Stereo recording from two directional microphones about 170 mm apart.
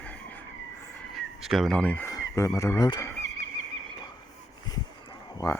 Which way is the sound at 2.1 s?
20° left (ahead or behind).